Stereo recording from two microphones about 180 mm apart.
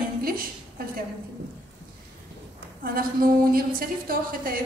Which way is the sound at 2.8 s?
55° right (ahead or behind).